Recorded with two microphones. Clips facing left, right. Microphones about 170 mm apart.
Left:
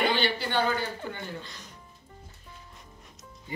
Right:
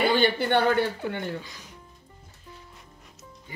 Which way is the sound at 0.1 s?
55° right (ahead or behind).